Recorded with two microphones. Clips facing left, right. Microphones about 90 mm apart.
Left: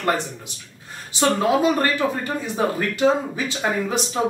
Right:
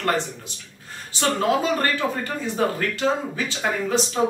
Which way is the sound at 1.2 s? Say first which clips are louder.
Left 3 dB; 15° left (ahead or behind).